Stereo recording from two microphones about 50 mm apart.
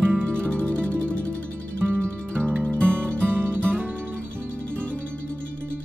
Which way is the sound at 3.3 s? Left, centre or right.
Right.